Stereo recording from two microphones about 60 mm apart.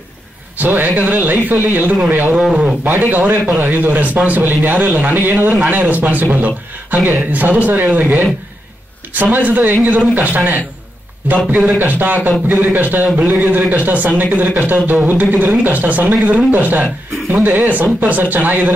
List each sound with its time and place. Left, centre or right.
0.6 s a man's voice: right